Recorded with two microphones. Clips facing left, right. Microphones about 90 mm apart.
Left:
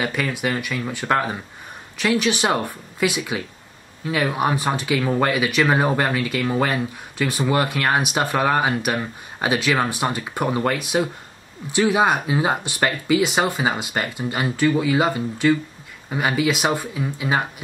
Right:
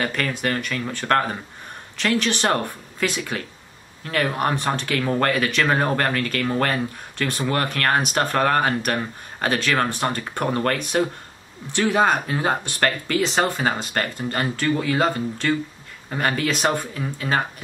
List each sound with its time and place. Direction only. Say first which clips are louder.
0.0 s speech: left 1 dB; 10° left (ahead or behind)